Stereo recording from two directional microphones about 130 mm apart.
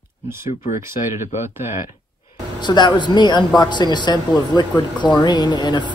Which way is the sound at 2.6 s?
35° left (ahead or behind).